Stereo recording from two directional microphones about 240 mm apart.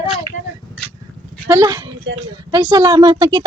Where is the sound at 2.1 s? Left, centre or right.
Right.